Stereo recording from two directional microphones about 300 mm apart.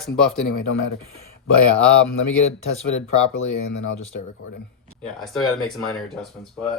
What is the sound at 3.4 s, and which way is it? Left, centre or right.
Speech, left.